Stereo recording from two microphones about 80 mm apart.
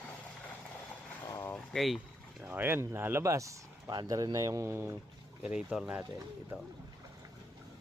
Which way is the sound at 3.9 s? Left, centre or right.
Right.